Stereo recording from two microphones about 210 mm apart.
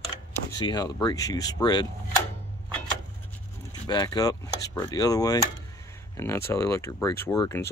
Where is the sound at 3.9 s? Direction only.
20° left (ahead or behind).